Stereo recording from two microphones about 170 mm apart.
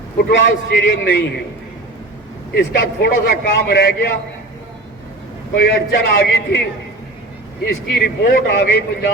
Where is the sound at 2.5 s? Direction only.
85° left.